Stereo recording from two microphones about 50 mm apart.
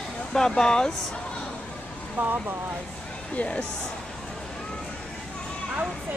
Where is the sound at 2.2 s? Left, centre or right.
Right.